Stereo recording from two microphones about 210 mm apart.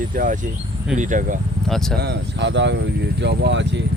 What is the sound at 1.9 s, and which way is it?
Speech, 55° right (ahead or behind).